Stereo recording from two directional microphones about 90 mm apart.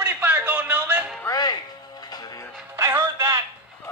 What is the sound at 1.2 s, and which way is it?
Music, 45° left (ahead or behind).